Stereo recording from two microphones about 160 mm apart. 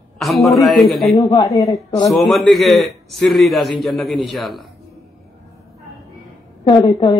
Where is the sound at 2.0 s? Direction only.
Centre (ahead or behind).